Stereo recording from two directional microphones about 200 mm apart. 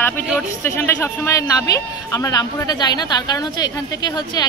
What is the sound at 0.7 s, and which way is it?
A man's voice, 10° left (ahead or behind).